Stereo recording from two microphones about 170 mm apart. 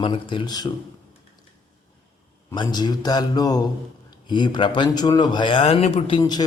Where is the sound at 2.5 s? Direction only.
25° left (ahead or behind).